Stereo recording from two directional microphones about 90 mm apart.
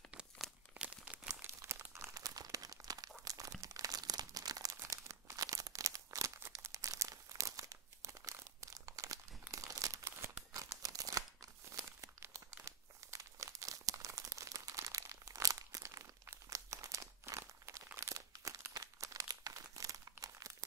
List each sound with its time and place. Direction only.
0.1 s crumpling: 10° right (ahead or behind)
1.4 s crumpling: 25° right (ahead or behind)
2.1 s crumpling: 40° right (ahead or behind)
10.5 s tearing: 40° right (ahead or behind)
11.7 s crumpling: 35° right (ahead or behind)